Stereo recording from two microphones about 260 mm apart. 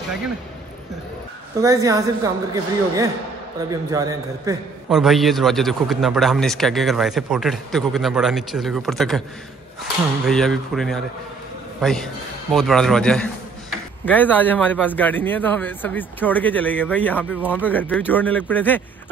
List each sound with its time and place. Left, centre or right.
1.6 s a woman's voice: centre
4.8 s a man's voice: centre
10.2 s a man's voice: centre